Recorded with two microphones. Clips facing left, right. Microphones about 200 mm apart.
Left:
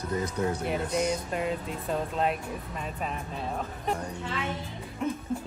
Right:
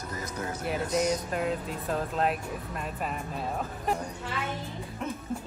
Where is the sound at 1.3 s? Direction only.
Centre (ahead or behind).